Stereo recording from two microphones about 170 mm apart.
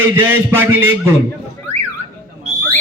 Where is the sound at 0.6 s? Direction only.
15° right (ahead or behind).